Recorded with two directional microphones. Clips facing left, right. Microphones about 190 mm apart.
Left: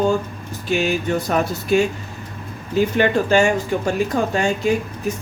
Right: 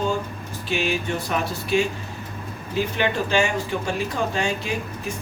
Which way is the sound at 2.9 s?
45° left (ahead or behind).